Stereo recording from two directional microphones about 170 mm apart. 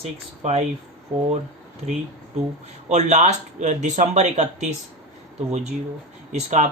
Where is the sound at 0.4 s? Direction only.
40° right (ahead or behind).